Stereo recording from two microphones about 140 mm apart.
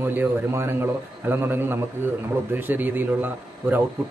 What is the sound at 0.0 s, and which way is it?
A man's voice, 15° right (ahead or behind).